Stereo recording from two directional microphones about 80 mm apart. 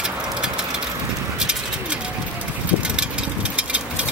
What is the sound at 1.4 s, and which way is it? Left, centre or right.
Bird, centre.